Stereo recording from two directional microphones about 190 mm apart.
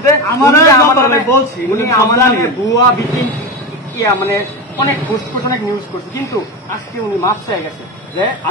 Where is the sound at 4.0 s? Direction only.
15° left (ahead or behind).